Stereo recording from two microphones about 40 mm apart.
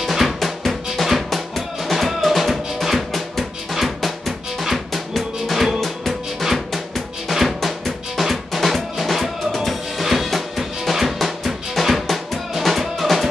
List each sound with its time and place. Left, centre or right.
0.0 s drum: centre
1.9 s music: centre
7.2 s drum: centre